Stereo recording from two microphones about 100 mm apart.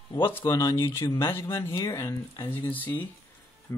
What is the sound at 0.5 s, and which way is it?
Speech, 35° left (ahead or behind).